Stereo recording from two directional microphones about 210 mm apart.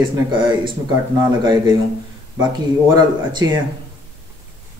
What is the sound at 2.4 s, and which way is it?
Speech, 20° right (ahead or behind).